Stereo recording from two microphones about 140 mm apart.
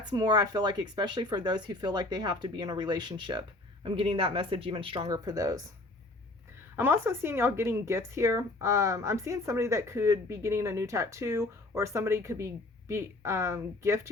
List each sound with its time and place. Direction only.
0.2 s speech: 30° right (ahead or behind)
5.0 s speech: 25° right (ahead or behind)
6.7 s speech: 15° right (ahead or behind)